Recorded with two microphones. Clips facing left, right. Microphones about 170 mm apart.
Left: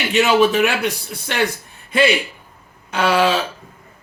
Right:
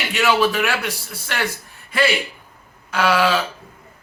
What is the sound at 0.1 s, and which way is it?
Speech, 20° left (ahead or behind).